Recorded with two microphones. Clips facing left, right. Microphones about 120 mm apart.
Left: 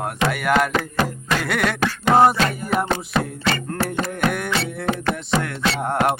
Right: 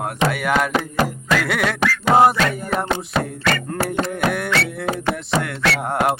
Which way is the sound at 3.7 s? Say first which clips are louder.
Right 2 dB; 10° right (ahead or behind).